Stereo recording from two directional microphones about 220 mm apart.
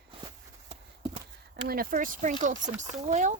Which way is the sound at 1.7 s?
40° right (ahead or behind).